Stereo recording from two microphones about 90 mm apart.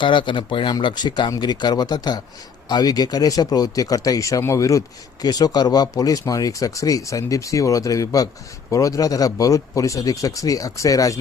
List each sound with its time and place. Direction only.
0.0 s speech: 65° left (ahead or behind); by 4.8 s 35° left (ahead or behind)
5.2 s speech: 45° left (ahead or behind)